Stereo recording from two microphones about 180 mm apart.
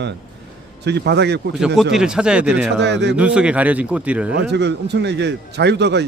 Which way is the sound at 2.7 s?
75° right (ahead or behind).